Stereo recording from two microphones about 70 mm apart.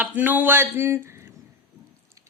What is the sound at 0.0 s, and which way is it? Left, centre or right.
Speech, right.